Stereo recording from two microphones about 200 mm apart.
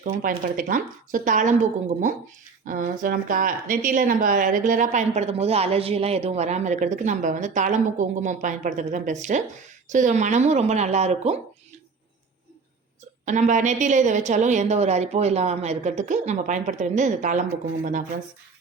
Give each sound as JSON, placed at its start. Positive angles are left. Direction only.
{"t": 0.0, "sound": "speech", "side_deg": -45}
{"t": 13.2, "sound": "speech", "side_deg": -40}